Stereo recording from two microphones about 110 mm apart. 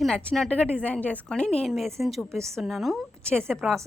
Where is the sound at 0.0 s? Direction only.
10° left (ahead or behind).